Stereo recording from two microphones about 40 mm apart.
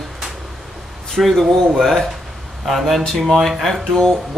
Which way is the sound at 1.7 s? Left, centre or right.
Centre.